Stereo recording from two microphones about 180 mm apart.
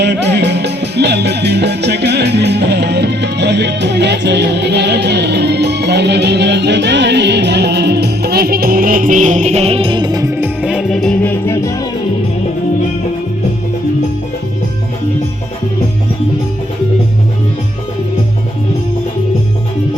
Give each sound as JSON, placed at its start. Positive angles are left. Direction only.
{"t": 0.0, "sound": "music", "side_deg": -70}
{"t": 10.6, "sound": "music", "side_deg": -5}